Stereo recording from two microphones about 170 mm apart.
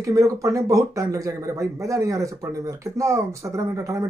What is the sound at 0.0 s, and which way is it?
Speech, 20° right (ahead or behind).